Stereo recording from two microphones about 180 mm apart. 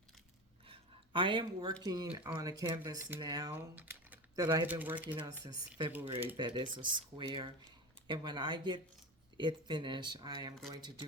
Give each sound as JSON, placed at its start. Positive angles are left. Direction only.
{"t": 0.7, "sound": "a sound", "side_deg": -30}
{"t": 1.8, "sound": "speech", "side_deg": -20}
{"t": 3.5, "sound": "speech", "side_deg": -10}
{"t": 4.4, "sound": "speech", "side_deg": -25}
{"t": 4.6, "sound": "speech", "side_deg": -10}
{"t": 5.4, "sound": "speech", "side_deg": -25}